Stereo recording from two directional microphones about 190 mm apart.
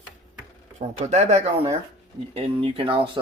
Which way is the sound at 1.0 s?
35° right (ahead or behind).